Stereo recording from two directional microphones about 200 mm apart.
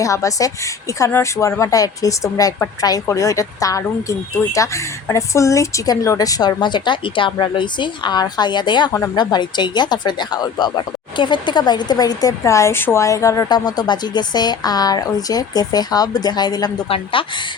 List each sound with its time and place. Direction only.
0.0 s a woman's voice: 15° left (ahead or behind)